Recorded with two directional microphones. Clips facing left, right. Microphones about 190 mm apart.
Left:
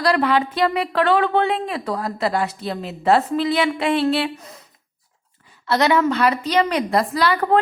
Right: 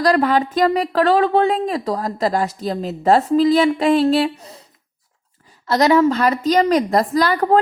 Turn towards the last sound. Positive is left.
turn(degrees=-45)  # may be behind; listen again after turning